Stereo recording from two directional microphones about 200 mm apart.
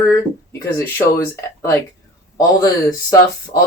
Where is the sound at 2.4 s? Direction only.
20° left (ahead or behind).